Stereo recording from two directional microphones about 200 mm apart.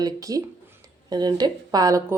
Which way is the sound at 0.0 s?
15° right (ahead or behind).